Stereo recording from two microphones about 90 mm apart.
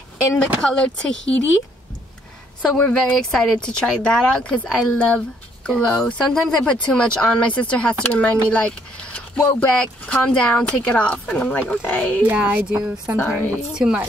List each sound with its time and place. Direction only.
0.6 s speech: 10° left (ahead or behind)
2.8 s speech: 10° left (ahead or behind)
12.2 s a woman's voice: 15° right (ahead or behind)